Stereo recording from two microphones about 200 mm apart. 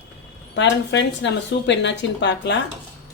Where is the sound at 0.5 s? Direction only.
65° left (ahead or behind).